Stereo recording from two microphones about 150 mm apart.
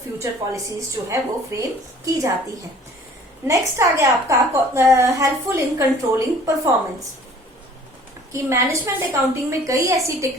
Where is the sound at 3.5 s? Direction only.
20° right (ahead or behind).